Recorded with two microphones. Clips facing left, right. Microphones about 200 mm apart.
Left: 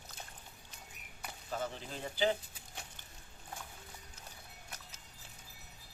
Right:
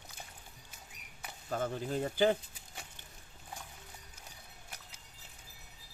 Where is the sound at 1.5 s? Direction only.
50° right (ahead or behind).